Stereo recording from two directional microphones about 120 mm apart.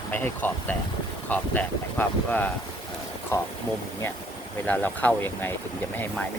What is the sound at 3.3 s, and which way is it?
Speech, 25° left (ahead or behind).